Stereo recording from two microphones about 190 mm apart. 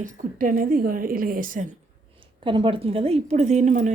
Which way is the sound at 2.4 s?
25° right (ahead or behind).